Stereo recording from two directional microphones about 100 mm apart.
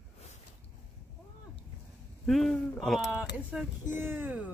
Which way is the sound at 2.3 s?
Centre (ahead or behind).